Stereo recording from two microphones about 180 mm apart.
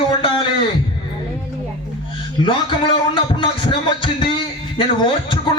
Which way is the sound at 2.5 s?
30° left (ahead or behind).